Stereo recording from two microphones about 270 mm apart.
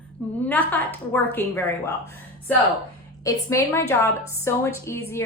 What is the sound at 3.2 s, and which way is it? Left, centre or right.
A woman's voice, centre.